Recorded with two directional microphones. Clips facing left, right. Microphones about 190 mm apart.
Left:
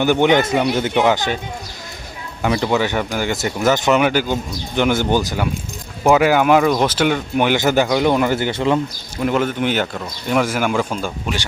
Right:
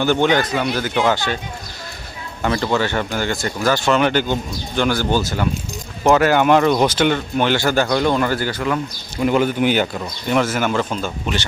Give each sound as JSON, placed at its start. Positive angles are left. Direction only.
{"t": 0.0, "sound": "speech", "side_deg": 15}
{"t": 2.4, "sound": "speech", "side_deg": 10}
{"t": 9.2, "sound": "speech", "side_deg": 0}
{"t": 10.3, "sound": "speech", "side_deg": 10}